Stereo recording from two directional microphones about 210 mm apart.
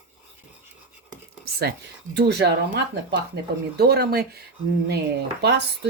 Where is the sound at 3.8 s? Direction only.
50° right (ahead or behind).